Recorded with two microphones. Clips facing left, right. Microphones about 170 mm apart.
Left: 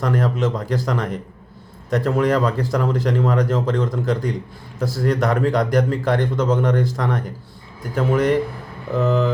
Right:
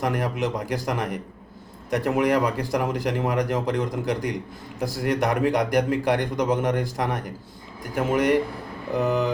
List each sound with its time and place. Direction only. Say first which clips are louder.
0.0 s a man's voice: left 4 dB; 15° right (ahead or behind)